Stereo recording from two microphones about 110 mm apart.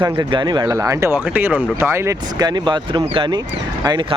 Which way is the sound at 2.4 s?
40° right (ahead or behind).